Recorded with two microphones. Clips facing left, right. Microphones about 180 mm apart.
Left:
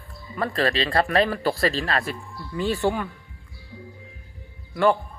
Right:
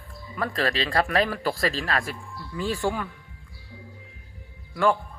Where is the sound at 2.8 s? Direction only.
20° left (ahead or behind).